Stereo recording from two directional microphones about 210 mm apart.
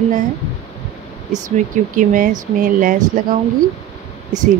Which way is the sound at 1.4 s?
35° right (ahead or behind).